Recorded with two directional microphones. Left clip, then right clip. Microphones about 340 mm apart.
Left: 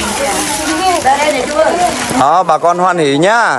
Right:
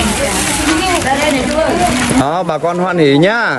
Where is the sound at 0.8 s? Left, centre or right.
Left.